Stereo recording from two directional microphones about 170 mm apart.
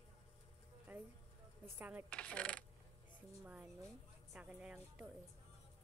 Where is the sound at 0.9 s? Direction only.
10° right (ahead or behind).